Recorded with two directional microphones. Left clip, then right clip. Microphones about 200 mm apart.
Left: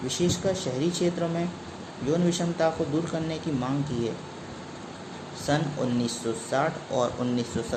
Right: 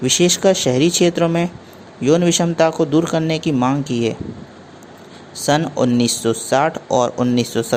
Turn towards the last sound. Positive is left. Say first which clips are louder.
# right 11 dB
turn(degrees=-45)  # may be behind; listen again after turning